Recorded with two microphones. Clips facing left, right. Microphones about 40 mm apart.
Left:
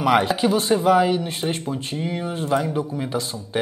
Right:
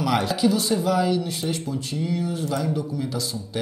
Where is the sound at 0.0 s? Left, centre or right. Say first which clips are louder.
Left 3 dB; left.